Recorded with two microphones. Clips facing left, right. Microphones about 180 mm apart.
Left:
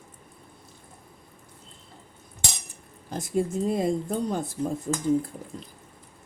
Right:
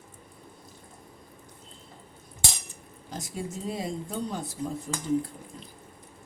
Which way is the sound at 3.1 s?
55° left (ahead or behind).